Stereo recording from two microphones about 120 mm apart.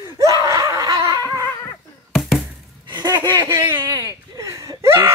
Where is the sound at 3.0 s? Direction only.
35° right (ahead or behind).